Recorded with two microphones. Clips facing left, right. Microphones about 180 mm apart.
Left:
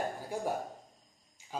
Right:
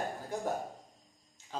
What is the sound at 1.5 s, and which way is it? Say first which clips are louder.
Jingle bell: left 1 dB; 10° left (ahead or behind).